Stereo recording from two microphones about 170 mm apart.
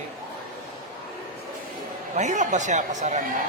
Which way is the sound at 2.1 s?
45° right (ahead or behind).